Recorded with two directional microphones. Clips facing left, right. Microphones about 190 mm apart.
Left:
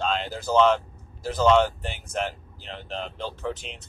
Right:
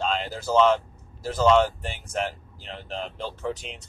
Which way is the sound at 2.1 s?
Centre (ahead or behind).